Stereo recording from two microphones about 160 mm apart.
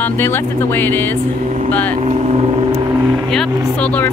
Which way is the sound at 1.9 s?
45° right (ahead or behind).